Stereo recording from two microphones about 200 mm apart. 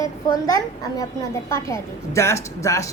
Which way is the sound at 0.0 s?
15° left (ahead or behind).